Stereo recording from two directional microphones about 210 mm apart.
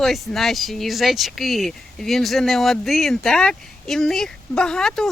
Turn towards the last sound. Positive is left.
turn(degrees=0)  # may be behind; listen again after turning